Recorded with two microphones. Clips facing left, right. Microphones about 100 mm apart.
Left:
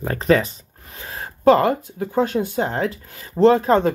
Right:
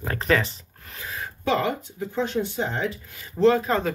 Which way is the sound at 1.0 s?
35° left (ahead or behind).